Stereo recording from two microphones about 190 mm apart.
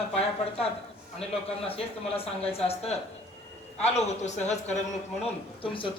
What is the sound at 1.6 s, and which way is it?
Speech, 30° left (ahead or behind).